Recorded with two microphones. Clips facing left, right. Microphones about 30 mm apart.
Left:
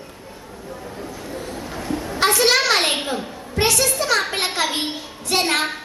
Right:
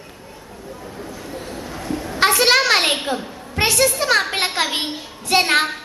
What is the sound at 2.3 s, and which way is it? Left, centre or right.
Speech, right.